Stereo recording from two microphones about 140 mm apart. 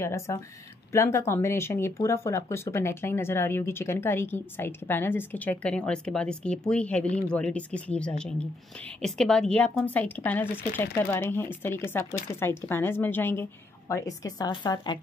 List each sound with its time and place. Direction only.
0.0 s speech: 20° left (ahead or behind)